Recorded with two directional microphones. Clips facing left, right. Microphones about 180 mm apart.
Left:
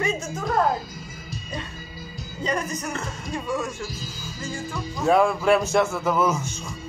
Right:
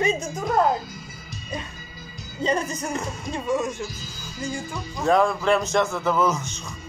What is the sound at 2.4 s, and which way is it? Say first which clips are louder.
Speech: right 3 dB; 25° right (ahead or behind).